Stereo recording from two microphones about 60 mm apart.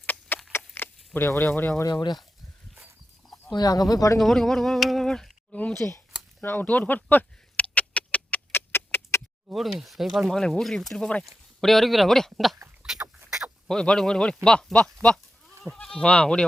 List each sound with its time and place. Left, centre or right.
0.0 s a sound: left
1.3 s speech: left
3.6 s speech: left
4.2 s speech: centre
5.8 s speech: left
6.4 s a sound: left
8.5 s a sound: left
9.5 s speech: centre
12.8 s rodents: centre
13.7 s speech: centre
15.0 s goat: centre
15.6 s speech: centre
16.0 s speech: centre